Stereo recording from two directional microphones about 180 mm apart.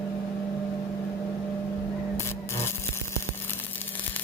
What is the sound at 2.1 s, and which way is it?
Rub, 15° left (ahead or behind).